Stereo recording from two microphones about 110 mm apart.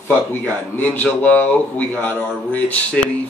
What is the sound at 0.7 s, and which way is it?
Speech, 15° left (ahead or behind).